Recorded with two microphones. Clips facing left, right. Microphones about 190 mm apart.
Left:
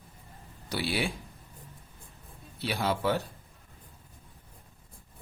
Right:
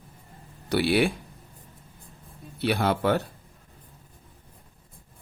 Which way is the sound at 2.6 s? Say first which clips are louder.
Right 6 dB; 60° right (ahead or behind).